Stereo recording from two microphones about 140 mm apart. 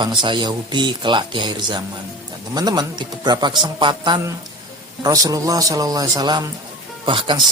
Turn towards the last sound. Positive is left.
turn(degrees=-35)  # may be behind; listen again after turning